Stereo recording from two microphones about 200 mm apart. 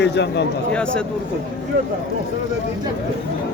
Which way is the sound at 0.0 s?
60° left (ahead or behind).